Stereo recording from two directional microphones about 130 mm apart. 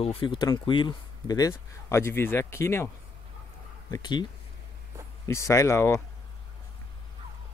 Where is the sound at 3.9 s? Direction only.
35° left (ahead or behind).